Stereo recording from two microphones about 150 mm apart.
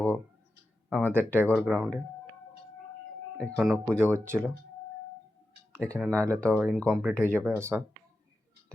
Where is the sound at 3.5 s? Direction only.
Centre (ahead or behind).